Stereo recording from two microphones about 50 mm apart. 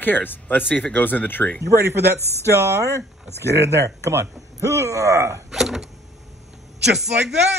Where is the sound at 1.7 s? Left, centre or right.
Right.